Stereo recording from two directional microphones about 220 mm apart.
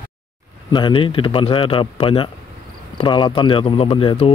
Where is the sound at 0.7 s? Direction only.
20° left (ahead or behind).